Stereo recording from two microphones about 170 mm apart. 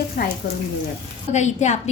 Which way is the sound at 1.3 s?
45° left (ahead or behind).